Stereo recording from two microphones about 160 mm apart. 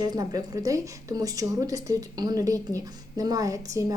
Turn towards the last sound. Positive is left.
turn(degrees=-20)  # may be behind; listen again after turning